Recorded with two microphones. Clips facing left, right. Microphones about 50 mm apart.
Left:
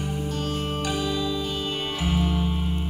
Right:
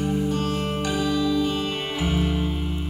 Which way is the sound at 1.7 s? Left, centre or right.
Centre.